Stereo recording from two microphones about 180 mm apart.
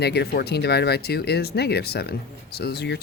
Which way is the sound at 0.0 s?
65° left (ahead or behind).